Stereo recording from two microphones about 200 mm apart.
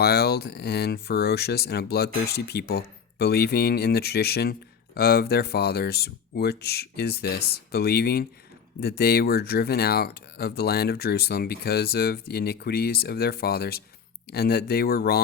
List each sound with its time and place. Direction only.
0.0 s speech: 50° left (ahead or behind)